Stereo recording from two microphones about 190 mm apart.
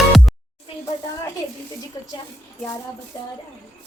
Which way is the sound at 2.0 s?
20° left (ahead or behind).